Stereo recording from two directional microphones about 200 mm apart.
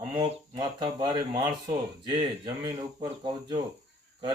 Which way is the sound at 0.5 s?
20° right (ahead or behind).